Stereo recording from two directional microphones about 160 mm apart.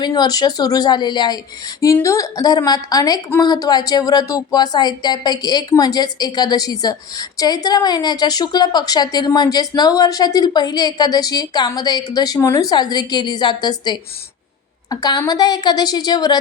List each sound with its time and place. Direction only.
0.0 s speech: 25° left (ahead or behind)